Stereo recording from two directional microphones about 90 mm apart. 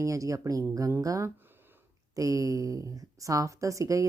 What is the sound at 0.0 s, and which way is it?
A woman's voice, 35° right (ahead or behind).